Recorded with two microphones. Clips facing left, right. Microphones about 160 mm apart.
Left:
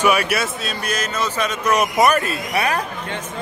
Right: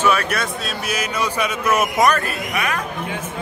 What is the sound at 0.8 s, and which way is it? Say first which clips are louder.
Speech: even; 10° right (ahead or behind).